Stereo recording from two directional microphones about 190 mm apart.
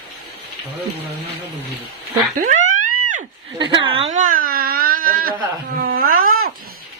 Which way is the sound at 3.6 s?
25° right (ahead or behind).